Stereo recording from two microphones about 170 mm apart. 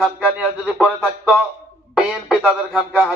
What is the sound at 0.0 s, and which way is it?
A man's voice, 5° right (ahead or behind).